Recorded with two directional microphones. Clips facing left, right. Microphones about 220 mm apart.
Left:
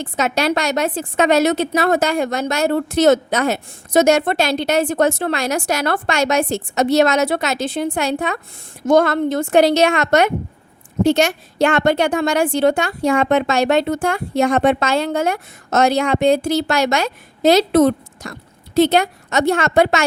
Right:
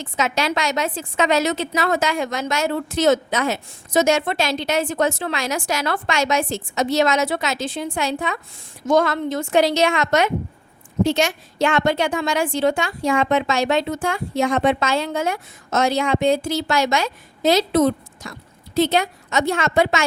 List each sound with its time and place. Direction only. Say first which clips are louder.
0.0 s a woman's voice: left 4 dB; 60° left (ahead or behind)